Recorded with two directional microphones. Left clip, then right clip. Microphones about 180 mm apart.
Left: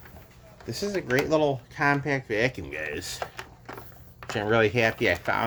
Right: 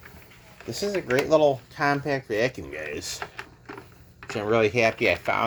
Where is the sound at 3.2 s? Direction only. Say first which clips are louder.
Left 1 dB; 55° left (ahead or behind).